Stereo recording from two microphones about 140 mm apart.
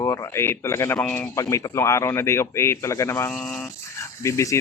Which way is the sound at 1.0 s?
5° left (ahead or behind).